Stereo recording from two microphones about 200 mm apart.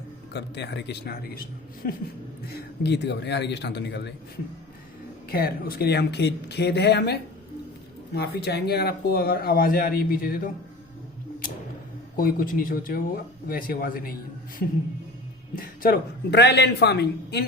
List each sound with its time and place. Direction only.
0.3 s speech: 60° left (ahead or behind)
5.3 s speech: 50° left (ahead or behind)
12.1 s speech: 45° left (ahead or behind)
15.5 s speech: 45° left (ahead or behind)